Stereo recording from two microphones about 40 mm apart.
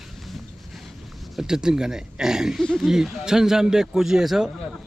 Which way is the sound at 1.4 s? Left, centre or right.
Centre.